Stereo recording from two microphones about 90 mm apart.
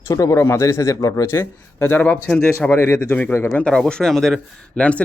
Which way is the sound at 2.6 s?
20° left (ahead or behind).